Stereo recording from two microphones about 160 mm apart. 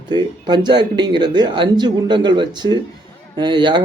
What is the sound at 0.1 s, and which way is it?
Speech, 25° right (ahead or behind).